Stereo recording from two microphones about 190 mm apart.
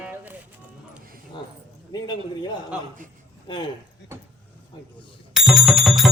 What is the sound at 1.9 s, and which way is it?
A man's voice, 20° left (ahead or behind).